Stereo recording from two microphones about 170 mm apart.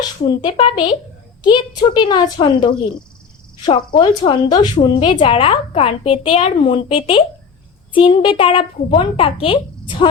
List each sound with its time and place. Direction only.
0.4 s a woman's voice: 30° left (ahead or behind)
4.7 s a woman's voice: 40° left (ahead or behind)